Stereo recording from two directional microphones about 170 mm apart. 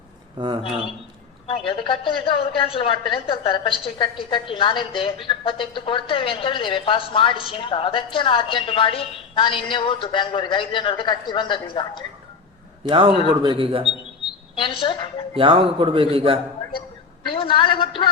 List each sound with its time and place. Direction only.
0.3 s speech: 25° right (ahead or behind)
1.5 s a woman's voice: 30° left (ahead or behind)
13.4 s speech: 30° right (ahead or behind)
14.5 s a woman's voice: 30° left (ahead or behind)
15.4 s speech: 30° right (ahead or behind)
17.2 s a woman's voice: 30° left (ahead or behind)